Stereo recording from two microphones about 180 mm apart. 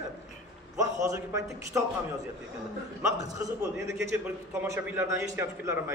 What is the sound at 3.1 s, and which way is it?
A man's voice, 15° right (ahead or behind).